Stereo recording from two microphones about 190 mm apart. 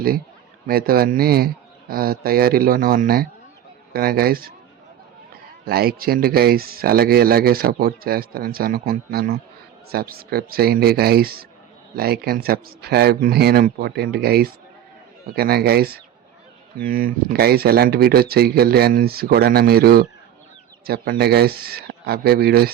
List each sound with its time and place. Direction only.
0.7 s speech: 50° right (ahead or behind)
5.6 s speech: 55° right (ahead or behind)